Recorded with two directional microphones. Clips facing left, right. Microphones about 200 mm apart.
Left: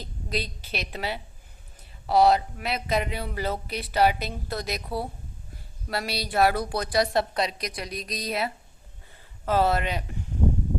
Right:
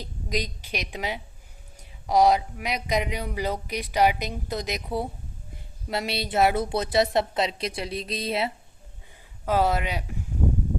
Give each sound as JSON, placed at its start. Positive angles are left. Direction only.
{"t": 0.0, "sound": "a woman's voice", "side_deg": -15}
{"t": 9.5, "sound": "speech", "side_deg": -10}